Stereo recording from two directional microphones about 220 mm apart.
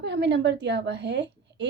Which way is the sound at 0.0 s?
50° right (ahead or behind).